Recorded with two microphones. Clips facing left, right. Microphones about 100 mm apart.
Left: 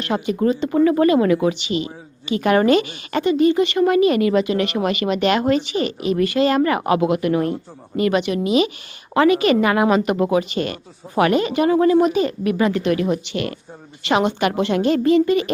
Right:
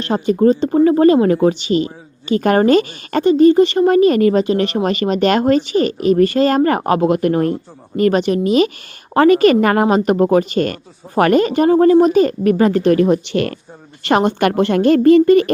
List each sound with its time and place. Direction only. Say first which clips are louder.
0.0 s a woman's voice: right 6 dB; 35° right (ahead or behind)